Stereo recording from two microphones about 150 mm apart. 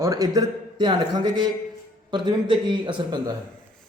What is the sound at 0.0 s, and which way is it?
Speech, 20° right (ahead or behind).